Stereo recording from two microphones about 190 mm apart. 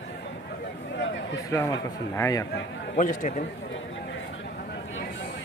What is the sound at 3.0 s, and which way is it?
Speech, 45° left (ahead or behind).